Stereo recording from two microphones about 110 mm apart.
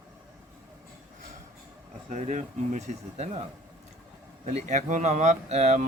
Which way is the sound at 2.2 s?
90° right.